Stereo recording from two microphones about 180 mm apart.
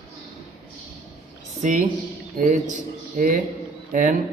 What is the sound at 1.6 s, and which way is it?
A man's voice, 45° right (ahead or behind).